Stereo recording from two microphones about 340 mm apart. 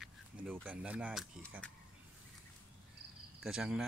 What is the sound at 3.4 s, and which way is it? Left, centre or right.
Speech, centre.